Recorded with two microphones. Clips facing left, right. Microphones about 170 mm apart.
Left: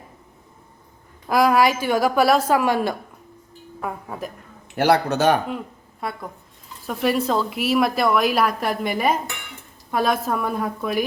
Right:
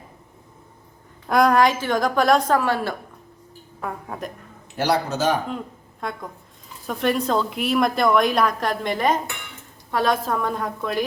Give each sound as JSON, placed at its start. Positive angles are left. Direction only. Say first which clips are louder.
{"t": 1.3, "sound": "a woman's voice", "louder": "even", "side_deg": 5}
{"t": 3.8, "sound": "a woman's voice", "louder": "left 1 dB", "side_deg": 5}
{"t": 4.8, "sound": "speech", "louder": "left 4 dB", "side_deg": 60}
{"t": 6.0, "sound": "a woman's voice", "louder": "left 1 dB", "side_deg": 5}